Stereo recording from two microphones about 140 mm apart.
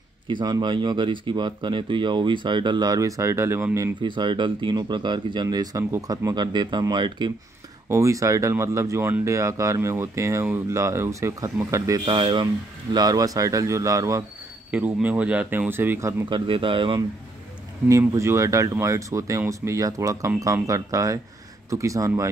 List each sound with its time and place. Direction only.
0.3 s speech: 30° right (ahead or behind)
4.0 s speech: 35° right (ahead or behind)
7.9 s speech: 20° right (ahead or behind)
12.0 s speech: 40° right (ahead or behind); by 14.2 s 25° right (ahead or behind)
14.7 s speech: 10° right (ahead or behind)
16.3 s speech: 35° right (ahead or behind)
17.8 s speech: 20° right (ahead or behind)